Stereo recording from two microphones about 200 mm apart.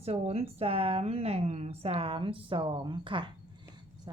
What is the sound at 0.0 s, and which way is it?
A woman's voice, 30° right (ahead or behind).